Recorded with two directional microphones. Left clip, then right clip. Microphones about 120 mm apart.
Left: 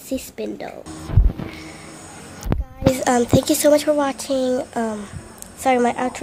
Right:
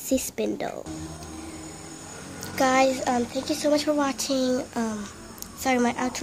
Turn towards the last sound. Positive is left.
turn(degrees=20)  # may be behind; listen again after turning